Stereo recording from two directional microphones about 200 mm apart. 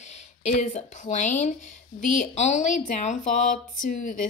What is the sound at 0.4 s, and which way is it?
A woman's voice, 35° left (ahead or behind).